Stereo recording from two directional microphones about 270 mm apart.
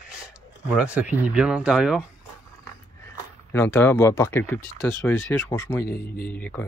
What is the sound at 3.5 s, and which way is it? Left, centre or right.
Speech, centre.